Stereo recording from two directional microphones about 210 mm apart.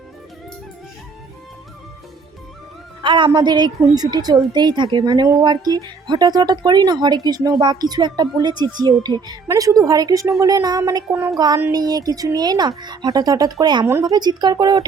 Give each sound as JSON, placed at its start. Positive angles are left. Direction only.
{"t": 3.0, "sound": "a woman's voice", "side_deg": -20}